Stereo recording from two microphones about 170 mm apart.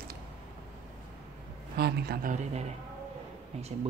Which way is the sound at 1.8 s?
65° right (ahead or behind).